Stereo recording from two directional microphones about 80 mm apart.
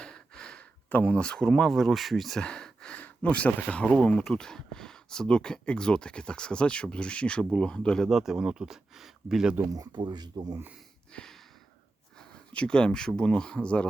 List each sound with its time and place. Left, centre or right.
0.0 s a sound: centre
3.0 s speech: centre
8.0 s speech: centre
9.7 s speech: right
11.1 s a sound: centre
12.5 s speech: centre